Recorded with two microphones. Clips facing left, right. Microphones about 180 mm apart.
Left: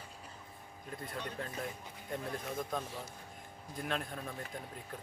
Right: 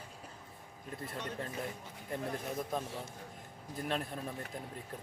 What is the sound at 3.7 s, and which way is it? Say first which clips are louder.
Speech: right 2 dB; 5° right (ahead or behind).